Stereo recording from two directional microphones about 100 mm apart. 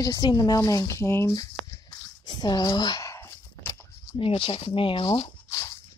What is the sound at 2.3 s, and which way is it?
Speech, 45° left (ahead or behind).